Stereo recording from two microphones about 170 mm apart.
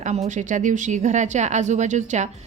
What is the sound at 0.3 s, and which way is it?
A woman's voice, 45° right (ahead or behind).